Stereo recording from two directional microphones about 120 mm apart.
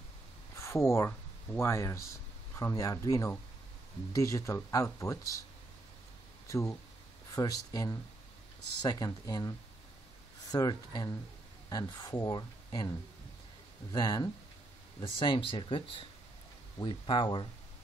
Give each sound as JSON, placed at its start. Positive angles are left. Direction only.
{"t": 0.6, "sound": "speech", "side_deg": 25}
{"t": 6.4, "sound": "speech", "side_deg": 25}
{"t": 10.5, "sound": "speech", "side_deg": 35}
{"t": 13.9, "sound": "speech", "side_deg": 30}
{"t": 15.0, "sound": "speech", "side_deg": 45}